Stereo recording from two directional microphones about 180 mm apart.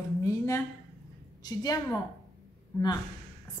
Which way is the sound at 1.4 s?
20° left (ahead or behind).